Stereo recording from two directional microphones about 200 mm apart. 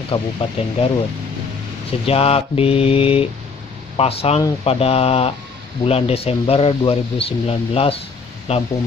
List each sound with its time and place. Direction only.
0.1 s speech: 25° left (ahead or behind)